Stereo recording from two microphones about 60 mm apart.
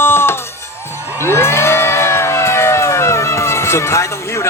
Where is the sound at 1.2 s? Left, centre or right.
Left.